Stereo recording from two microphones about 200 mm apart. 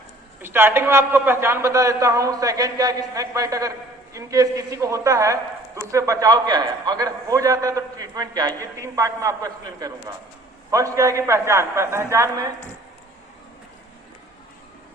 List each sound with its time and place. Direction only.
0.4 s a man's voice: 10° right (ahead or behind)